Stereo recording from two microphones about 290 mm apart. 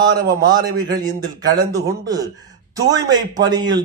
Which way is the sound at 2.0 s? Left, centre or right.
Centre.